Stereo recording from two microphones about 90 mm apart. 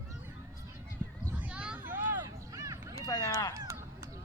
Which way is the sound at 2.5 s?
40° right (ahead or behind).